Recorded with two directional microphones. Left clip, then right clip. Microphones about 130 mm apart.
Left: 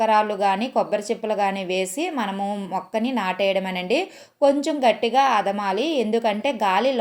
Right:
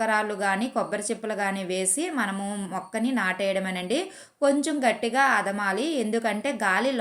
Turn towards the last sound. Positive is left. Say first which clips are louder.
# left 4 dB
turn(degrees=20)  # may be behind; listen again after turning